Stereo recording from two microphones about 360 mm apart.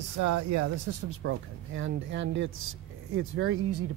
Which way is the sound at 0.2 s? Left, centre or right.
Right.